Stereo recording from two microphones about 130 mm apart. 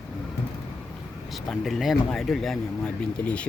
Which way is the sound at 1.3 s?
Centre (ahead or behind).